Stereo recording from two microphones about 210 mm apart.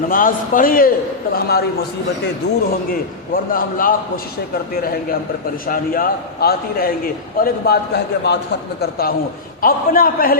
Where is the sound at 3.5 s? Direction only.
40° left (ahead or behind).